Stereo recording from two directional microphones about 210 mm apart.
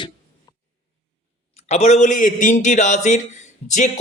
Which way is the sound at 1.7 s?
35° left (ahead or behind).